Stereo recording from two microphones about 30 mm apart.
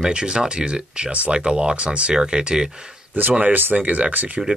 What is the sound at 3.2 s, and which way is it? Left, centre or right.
Speech, right.